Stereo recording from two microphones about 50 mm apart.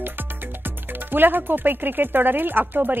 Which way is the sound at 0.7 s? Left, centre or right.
Right.